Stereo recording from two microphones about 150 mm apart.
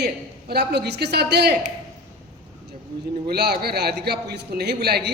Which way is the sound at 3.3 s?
90° right.